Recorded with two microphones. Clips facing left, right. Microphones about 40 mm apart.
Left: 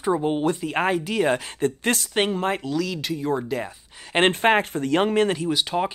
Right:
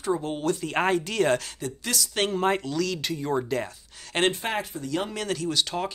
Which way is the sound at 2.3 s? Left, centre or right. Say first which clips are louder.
Even; centre.